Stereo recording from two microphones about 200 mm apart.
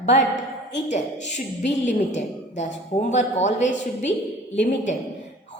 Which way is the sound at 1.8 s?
35° left (ahead or behind).